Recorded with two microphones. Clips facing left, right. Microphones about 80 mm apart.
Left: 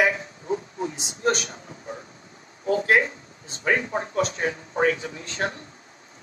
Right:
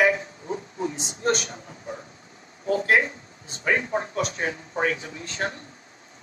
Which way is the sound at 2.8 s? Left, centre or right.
Left.